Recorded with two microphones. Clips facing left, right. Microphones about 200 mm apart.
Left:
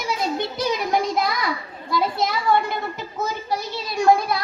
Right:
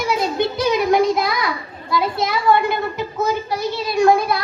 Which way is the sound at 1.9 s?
65° right (ahead or behind).